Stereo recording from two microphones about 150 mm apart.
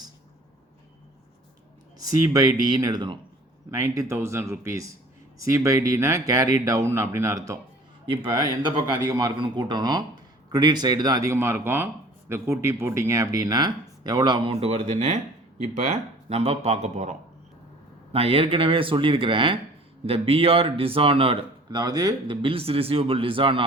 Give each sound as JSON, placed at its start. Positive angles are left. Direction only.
{"t": 2.0, "sound": "speech", "side_deg": -25}
{"t": 3.7, "sound": "speech", "side_deg": -20}
{"t": 14.5, "sound": "speech", "side_deg": -45}
{"t": 18.1, "sound": "speech", "side_deg": -40}